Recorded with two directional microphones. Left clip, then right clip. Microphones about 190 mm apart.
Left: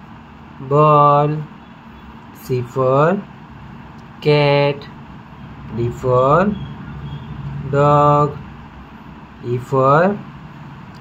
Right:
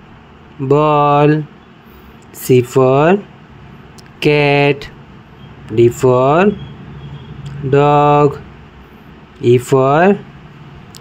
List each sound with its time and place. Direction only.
0.7 s speech: 50° right (ahead or behind)
2.4 s speech: 50° right (ahead or behind)
4.2 s speech: 45° right (ahead or behind)
7.7 s speech: 50° right (ahead or behind)
9.4 s speech: 50° right (ahead or behind)